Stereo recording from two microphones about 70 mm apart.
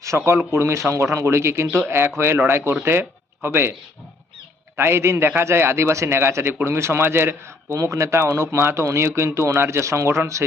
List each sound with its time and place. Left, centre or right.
0.3 s a man's voice: right
4.8 s a man's voice: right